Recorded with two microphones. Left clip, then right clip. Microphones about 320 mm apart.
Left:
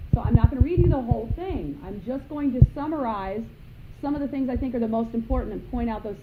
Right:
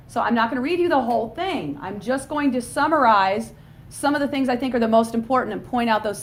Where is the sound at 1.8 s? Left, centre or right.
Right.